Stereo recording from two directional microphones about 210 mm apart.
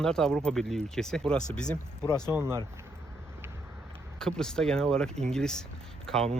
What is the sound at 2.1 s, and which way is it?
Speech, 20° left (ahead or behind).